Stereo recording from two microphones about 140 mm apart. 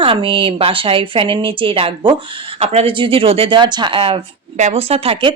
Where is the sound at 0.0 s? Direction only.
40° right (ahead or behind).